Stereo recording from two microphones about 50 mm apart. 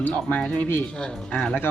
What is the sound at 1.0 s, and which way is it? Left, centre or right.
Speech, centre.